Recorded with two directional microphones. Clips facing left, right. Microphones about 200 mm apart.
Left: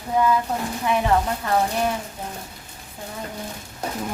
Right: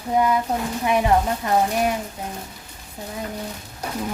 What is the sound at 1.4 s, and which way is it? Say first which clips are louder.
Speech: right 1 dB; 15° right (ahead or behind).